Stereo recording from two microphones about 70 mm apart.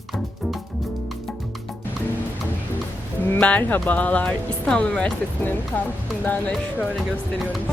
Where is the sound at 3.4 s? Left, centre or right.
Left.